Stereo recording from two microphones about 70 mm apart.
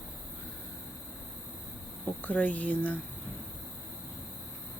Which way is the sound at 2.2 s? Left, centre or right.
Left.